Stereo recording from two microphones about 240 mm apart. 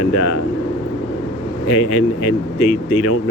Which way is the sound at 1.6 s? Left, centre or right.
Left.